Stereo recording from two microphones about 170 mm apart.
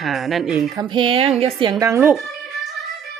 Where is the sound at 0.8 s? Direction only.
25° right (ahead or behind).